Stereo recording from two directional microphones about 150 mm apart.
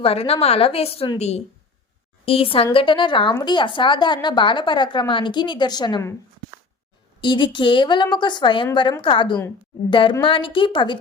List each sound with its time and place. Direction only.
0.0 s speech: 40° left (ahead or behind)
2.2 s speech: 40° left (ahead or behind)
7.2 s speech: 30° left (ahead or behind)